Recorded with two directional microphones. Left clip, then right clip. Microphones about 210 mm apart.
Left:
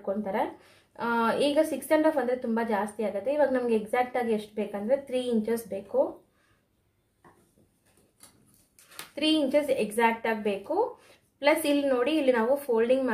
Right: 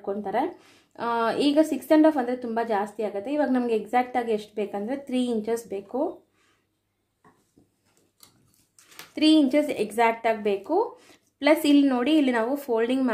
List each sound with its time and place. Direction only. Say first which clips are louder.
0.0 s speech: right 2 dB; 50° right (ahead or behind)
9.1 s speech: right 5 dB; 50° right (ahead or behind)